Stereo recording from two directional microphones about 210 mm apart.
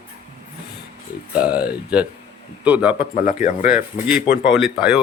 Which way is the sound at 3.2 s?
40° left (ahead or behind).